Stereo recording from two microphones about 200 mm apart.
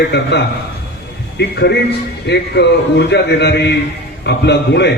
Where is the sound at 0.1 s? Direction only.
55° left (ahead or behind).